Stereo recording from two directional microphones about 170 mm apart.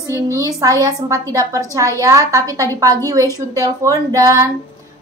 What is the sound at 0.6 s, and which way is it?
A woman's voice, 20° right (ahead or behind).